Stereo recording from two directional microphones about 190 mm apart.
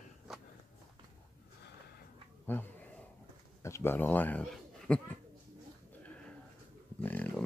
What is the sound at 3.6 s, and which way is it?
A man's voice, 15° left (ahead or behind).